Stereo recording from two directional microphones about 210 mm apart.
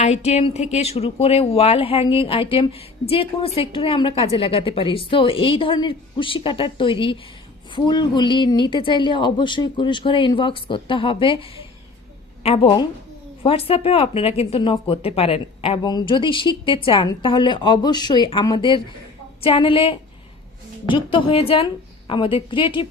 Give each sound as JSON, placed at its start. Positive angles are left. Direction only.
{"t": 0.0, "sound": "a woman's voice", "side_deg": 30}